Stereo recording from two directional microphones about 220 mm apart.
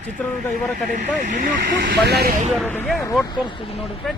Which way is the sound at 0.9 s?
35° right (ahead or behind).